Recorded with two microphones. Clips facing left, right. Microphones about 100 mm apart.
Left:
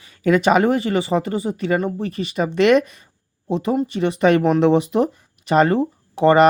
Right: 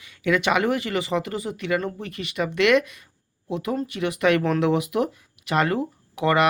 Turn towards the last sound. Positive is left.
turn(degrees=30)  # may be behind; listen again after turning